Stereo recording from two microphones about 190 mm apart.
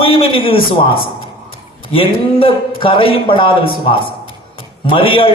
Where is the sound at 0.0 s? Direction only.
30° left (ahead or behind).